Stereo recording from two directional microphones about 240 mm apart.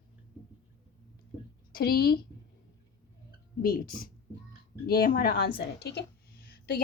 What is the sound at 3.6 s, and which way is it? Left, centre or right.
A woman's voice, left.